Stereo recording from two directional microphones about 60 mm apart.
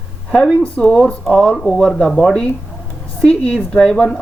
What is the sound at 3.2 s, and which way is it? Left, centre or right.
Speech, centre.